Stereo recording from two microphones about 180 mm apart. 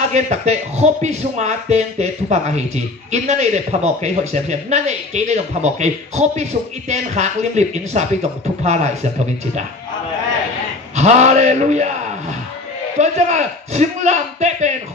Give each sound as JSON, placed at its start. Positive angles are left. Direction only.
{"t": 0.1, "sound": "speech", "side_deg": -40}
{"t": 11.0, "sound": "speech", "side_deg": -40}
{"t": 12.9, "sound": "speech", "side_deg": -40}